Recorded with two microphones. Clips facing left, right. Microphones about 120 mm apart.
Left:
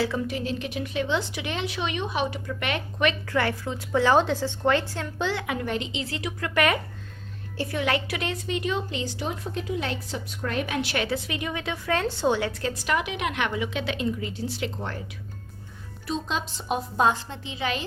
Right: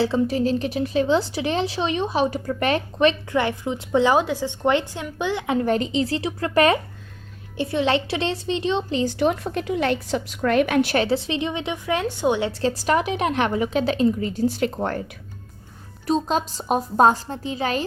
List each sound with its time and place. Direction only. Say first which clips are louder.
0.0 s speech: right 7 dB; 30° right (ahead or behind)
3.2 s speech: right 3 dB; 20° right (ahead or behind)
5.5 s speech: right 8 dB; 35° right (ahead or behind)
9.0 s a woman's voice: right 10 dB; 65° right (ahead or behind)
10.9 s speech: right 7 dB; 30° right (ahead or behind); by 12.5 s 15° right (ahead or behind)
12.5 s speech: right 6 dB; 35° right (ahead or behind); by 15.0 s 50° right (ahead or behind)
16.0 s speech: right 8 dB; 40° right (ahead or behind)